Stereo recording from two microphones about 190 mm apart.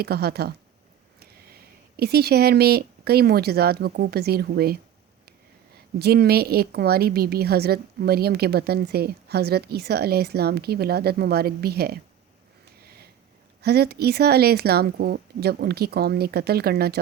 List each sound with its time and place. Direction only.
0.0 s a woman's voice: 55° right (ahead or behind)
6.0 s a woman's voice: 55° right (ahead or behind)
12.8 s a sound: 55° right (ahead or behind)
13.6 s a woman's voice: 55° right (ahead or behind)